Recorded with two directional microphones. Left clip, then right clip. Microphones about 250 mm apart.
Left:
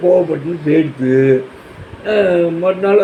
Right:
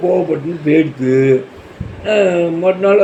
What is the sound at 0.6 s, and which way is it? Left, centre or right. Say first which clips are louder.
A man's voice: right 1 dB; centre.